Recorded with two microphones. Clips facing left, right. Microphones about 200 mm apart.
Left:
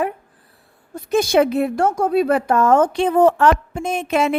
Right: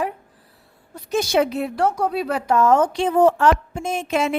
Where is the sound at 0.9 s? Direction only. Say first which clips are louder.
Left 4 dB; 50° left (ahead or behind).